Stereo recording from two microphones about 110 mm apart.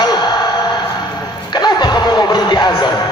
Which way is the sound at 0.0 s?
40° left (ahead or behind).